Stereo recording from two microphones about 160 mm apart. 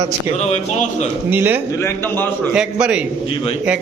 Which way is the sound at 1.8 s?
10° left (ahead or behind).